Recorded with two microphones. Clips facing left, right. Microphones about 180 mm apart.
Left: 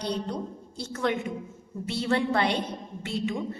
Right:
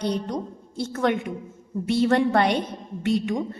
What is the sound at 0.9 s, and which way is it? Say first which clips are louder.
A woman's voice: right 4 dB; 55° right (ahead or behind).